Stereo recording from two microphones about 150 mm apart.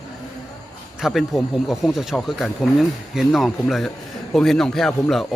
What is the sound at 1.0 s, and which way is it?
Speech, centre (ahead or behind).